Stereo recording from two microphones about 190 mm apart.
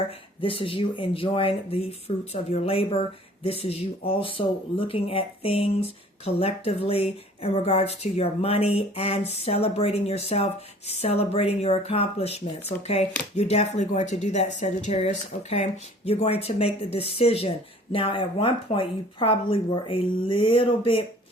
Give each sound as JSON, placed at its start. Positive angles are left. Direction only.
{"t": 0.4, "sound": "speech", "side_deg": 30}